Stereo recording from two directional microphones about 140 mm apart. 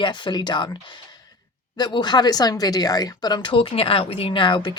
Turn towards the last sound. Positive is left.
turn(degrees=35)  # may be behind; listen again after turning